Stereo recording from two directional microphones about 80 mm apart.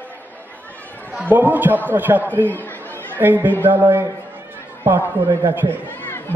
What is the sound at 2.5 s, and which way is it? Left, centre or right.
Chatter, left.